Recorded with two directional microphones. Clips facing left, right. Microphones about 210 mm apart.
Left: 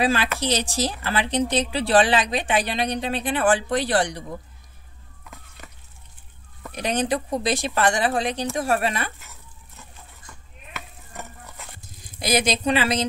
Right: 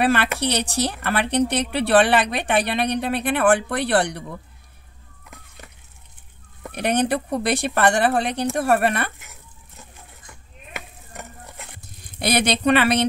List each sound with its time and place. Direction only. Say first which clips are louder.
0.0 s speech: right 2 dB; 65° right (ahead or behind)
6.7 s speech: right 3 dB; 60° right (ahead or behind)
11.8 s speech: right 5 dB; 65° right (ahead or behind)